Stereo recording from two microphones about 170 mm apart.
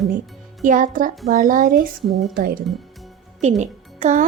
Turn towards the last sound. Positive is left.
turn(degrees=-45)  # may be behind; listen again after turning